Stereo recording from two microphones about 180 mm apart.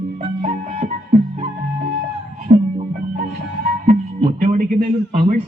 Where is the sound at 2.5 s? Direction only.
50° right (ahead or behind).